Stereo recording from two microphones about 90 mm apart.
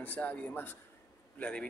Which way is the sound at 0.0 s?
20° left (ahead or behind).